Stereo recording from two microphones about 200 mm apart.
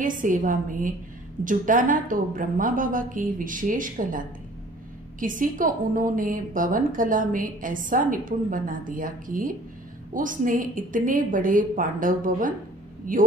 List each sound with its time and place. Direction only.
0.0 s a woman's voice: 40° right (ahead or behind)
5.2 s a woman's voice: 40° right (ahead or behind)